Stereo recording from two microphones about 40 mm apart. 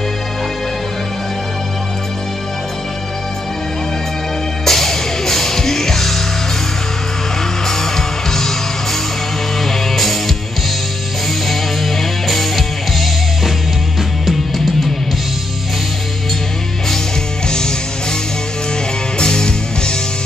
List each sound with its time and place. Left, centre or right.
4.6 s music: centre
7.6 s music: centre
9.7 s music: centre
12.0 s music: centre
14.2 s music: centre
17.5 s music: centre
19.1 s music: centre